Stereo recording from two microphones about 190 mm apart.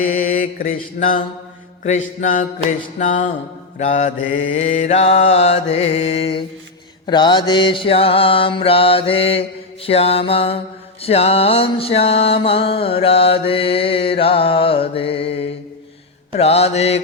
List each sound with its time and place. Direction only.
0.0 s mantra: 45° left (ahead or behind)